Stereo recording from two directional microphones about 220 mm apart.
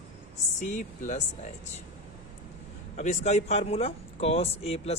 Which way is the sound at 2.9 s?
30° left (ahead or behind).